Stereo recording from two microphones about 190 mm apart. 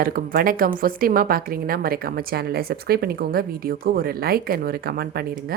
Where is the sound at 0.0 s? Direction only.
50° right (ahead or behind).